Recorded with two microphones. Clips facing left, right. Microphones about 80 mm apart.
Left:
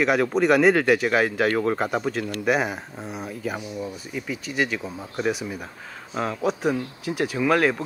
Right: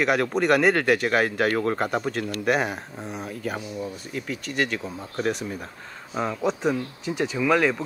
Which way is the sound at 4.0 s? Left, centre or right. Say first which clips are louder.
Left 1 dB; centre.